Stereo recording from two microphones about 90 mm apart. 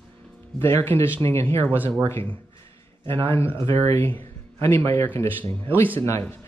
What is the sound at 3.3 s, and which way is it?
A man's voice, 30° left (ahead or behind).